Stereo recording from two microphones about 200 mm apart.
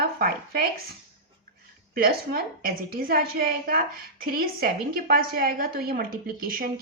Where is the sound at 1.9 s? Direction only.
50° right (ahead or behind).